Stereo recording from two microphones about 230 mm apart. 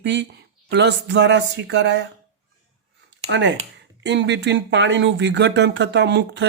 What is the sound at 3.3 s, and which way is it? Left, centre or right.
Speech, right.